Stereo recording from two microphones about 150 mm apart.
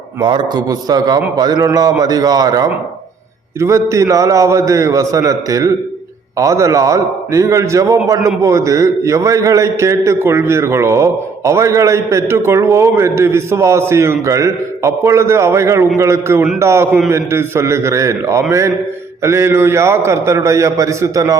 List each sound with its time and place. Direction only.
0.2 s a man's voice: 30° right (ahead or behind)